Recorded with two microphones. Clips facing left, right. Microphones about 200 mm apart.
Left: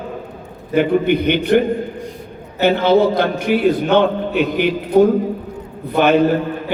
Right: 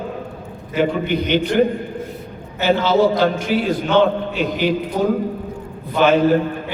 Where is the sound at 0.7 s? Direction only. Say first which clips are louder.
Left 4 dB; 55° left (ahead or behind).